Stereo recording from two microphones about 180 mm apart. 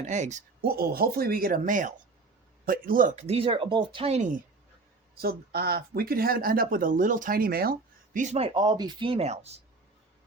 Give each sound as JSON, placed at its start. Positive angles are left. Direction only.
{"t": 0.0, "sound": "speech", "side_deg": -40}
{"t": 0.6, "sound": "speech", "side_deg": -55}
{"t": 5.1, "sound": "speech", "side_deg": -60}